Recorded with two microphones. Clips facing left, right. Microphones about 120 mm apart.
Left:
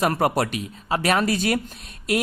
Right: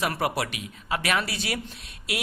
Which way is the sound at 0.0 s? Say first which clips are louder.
Left 6 dB; 45° left (ahead or behind).